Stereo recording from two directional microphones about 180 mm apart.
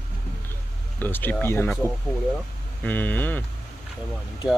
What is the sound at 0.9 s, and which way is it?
Speech, 10° left (ahead or behind).